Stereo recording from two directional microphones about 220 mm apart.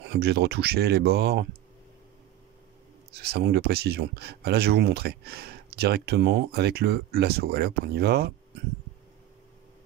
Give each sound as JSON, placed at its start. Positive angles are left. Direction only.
{"t": 0.0, "sound": "speech", "side_deg": -45}
{"t": 3.1, "sound": "speech", "side_deg": -45}